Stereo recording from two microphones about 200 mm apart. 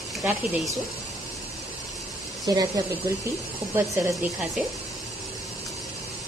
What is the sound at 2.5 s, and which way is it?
Speech, 20° right (ahead or behind).